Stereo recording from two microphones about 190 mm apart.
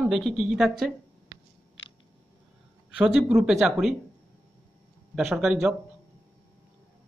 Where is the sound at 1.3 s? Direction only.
15° right (ahead or behind).